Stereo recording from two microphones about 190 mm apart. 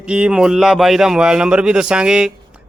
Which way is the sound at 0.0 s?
5° right (ahead or behind).